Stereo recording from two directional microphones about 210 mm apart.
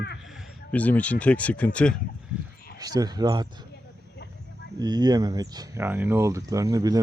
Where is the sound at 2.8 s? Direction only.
20° right (ahead or behind).